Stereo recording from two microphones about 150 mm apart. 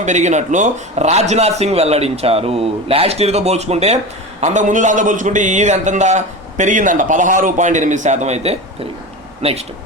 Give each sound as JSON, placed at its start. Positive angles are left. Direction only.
{"t": 0.0, "sound": "a man's voice", "side_deg": -50}